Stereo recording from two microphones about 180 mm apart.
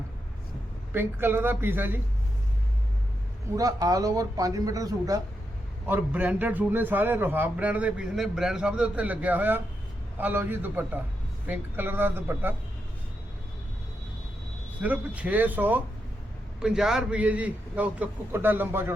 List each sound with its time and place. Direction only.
0.9 s a man's voice: 10° right (ahead or behind)
3.5 s speech: 20° right (ahead or behind)
5.9 s a man's voice: 10° right (ahead or behind)
14.8 s a man's voice: 10° right (ahead or behind)